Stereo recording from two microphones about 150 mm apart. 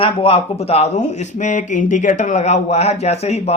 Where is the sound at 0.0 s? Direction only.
40° left (ahead or behind).